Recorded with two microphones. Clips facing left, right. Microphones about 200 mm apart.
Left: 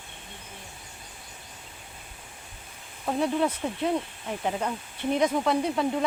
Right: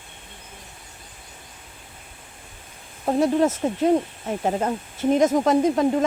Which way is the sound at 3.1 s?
40° right (ahead or behind).